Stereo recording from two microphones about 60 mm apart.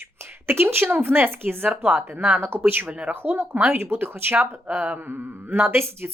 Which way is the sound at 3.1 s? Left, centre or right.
Right.